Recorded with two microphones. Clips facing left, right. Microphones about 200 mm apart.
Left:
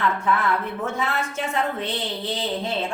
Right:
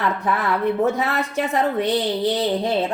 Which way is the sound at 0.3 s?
35° right (ahead or behind).